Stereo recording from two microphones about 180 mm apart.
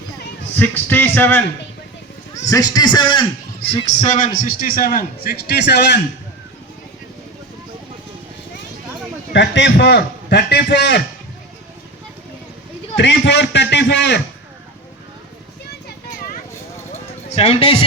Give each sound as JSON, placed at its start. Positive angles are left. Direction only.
{"t": 0.6, "sound": "a man's voice", "side_deg": 10}
{"t": 2.5, "sound": "a man's voice", "side_deg": 20}
{"t": 3.7, "sound": "a man's voice", "side_deg": 35}
{"t": 9.3, "sound": "a man's voice", "side_deg": 75}
{"t": 13.0, "sound": "a man's voice", "side_deg": 75}
{"t": 17.2, "sound": "a man's voice", "side_deg": 35}